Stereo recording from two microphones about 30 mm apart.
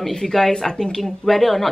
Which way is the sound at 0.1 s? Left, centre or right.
Centre.